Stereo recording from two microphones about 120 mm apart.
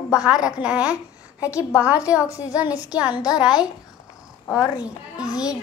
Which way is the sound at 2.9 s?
10° right (ahead or behind).